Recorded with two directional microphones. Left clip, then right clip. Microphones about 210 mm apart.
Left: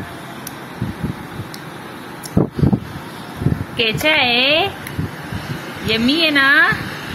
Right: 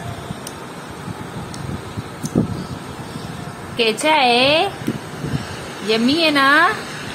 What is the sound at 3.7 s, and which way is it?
Speech, 15° right (ahead or behind).